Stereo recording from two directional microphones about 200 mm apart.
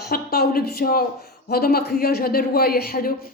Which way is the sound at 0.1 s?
50° left (ahead or behind).